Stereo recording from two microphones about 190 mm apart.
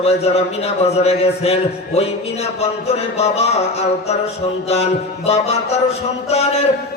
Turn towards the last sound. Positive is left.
turn(degrees=35)  # may be behind; listen again after turning